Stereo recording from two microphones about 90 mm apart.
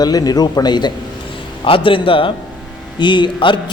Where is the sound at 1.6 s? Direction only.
80° left.